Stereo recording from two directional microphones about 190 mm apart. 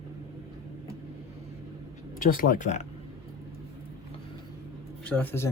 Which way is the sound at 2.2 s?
45° left (ahead or behind).